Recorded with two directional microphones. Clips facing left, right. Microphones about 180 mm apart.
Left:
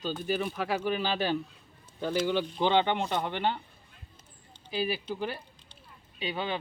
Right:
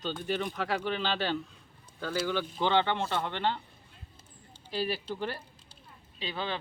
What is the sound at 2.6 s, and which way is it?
Speech, 15° left (ahead or behind).